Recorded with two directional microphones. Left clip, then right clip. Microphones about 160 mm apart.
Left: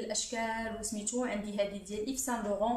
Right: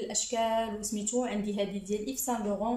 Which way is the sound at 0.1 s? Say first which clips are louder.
Right 7 dB; 15° right (ahead or behind).